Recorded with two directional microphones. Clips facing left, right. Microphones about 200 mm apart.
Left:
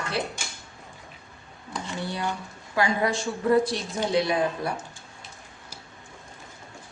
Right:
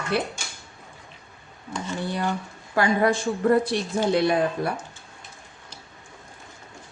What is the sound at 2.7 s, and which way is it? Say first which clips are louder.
A woman's voice: right 4 dB; 55° right (ahead or behind).